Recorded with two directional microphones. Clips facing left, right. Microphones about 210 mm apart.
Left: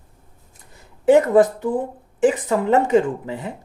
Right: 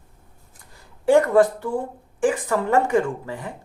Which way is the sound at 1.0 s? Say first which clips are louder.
Left 2 dB; 20° left (ahead or behind).